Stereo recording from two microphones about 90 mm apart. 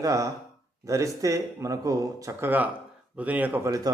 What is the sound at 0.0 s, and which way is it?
Speech, 35° right (ahead or behind).